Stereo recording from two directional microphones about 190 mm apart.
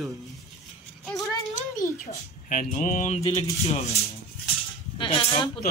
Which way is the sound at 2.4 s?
45° left (ahead or behind).